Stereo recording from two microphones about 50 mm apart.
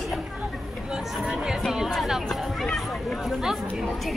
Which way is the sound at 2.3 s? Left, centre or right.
Centre.